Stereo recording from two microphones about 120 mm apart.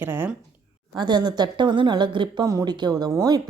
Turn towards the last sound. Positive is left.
turn(degrees=-30)  # may be behind; listen again after turning